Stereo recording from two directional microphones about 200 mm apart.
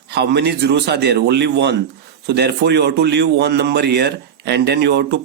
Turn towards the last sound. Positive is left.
turn(degrees=-60)  # may be behind; listen again after turning